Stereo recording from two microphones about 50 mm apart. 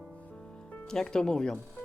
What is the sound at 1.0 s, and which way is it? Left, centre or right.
Speech, centre.